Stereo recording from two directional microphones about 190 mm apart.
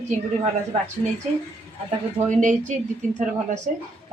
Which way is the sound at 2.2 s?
40° right (ahead or behind).